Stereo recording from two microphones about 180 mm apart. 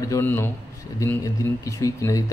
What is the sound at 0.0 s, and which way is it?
A man's voice, 15° left (ahead or behind).